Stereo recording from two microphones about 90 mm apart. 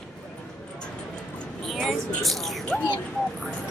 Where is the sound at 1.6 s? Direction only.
Centre (ahead or behind).